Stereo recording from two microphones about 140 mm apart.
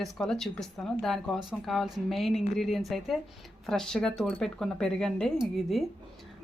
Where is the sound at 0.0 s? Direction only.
Centre (ahead or behind).